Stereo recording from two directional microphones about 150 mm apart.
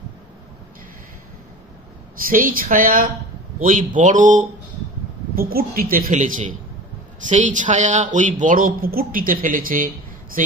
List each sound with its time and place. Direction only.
2.2 s a woman's voice: 70° right (ahead or behind)
5.3 s a woman's voice: 85° right; by 9.8 s 70° right (ahead or behind)